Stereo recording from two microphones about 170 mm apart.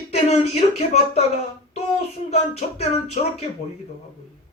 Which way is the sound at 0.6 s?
40° left (ahead or behind).